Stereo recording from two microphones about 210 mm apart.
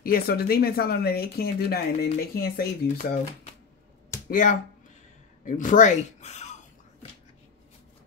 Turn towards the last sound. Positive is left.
turn(degrees=35)  # may be behind; listen again after turning